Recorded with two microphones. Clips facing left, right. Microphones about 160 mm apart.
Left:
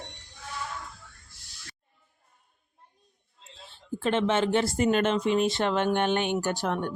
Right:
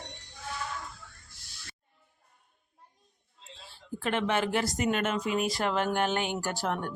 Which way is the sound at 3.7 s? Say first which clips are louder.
Left 4 dB; 25° left (ahead or behind).